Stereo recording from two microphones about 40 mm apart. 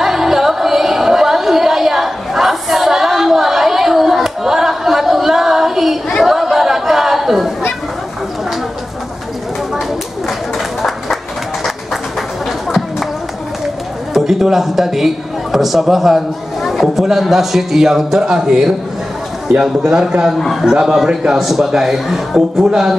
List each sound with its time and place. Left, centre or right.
0.0 s music: centre
6.2 s chatter: centre
14.1 s a man's voice: centre